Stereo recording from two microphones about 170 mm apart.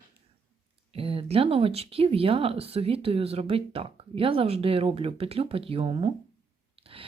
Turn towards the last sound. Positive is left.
turn(degrees=-35)  # may be behind; listen again after turning